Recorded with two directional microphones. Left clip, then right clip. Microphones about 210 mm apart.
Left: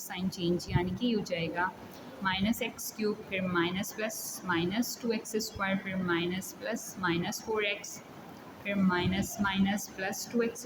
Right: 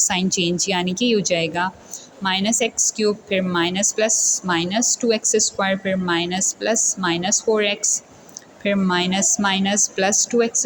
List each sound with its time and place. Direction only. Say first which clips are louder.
0.1 s a woman's voice: right 13 dB; 35° right (ahead or behind)